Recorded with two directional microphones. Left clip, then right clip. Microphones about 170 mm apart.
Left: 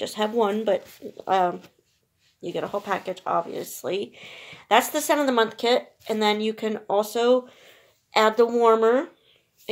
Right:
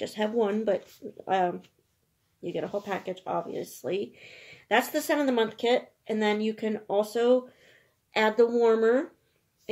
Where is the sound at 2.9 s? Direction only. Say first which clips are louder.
Left 6 dB; 10° right (ahead or behind).